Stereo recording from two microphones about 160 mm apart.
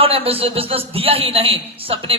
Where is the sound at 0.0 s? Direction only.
35° right (ahead or behind).